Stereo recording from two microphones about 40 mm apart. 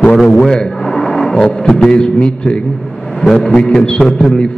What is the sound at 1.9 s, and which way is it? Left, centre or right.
A man's voice, left.